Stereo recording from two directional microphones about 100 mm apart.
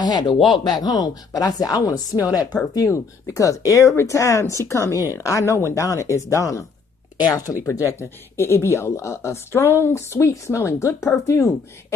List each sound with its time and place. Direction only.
0.0 s speech: 45° left (ahead or behind)
7.2 s speech: 40° left (ahead or behind)